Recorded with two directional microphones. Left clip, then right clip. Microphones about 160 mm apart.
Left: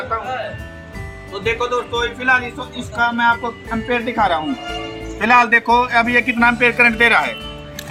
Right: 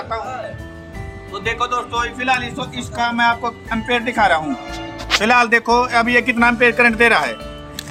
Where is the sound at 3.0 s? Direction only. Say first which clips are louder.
Left 1 dB; 30° right (ahead or behind).